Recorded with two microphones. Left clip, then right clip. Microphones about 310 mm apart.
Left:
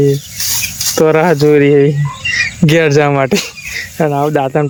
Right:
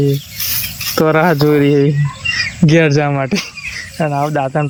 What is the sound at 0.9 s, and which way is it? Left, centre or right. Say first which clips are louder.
Speech: left 2 dB; centre.